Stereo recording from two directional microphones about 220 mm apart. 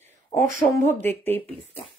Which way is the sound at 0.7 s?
10° left (ahead or behind).